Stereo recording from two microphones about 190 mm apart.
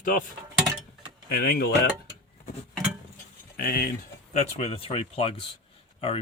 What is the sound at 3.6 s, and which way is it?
Speech, 50° left (ahead or behind).